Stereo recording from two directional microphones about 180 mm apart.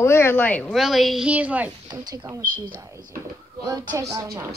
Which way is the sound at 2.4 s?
50° right (ahead or behind).